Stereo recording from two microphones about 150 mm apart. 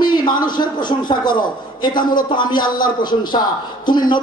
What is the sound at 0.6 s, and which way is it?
A man's voice, 30° left (ahead or behind).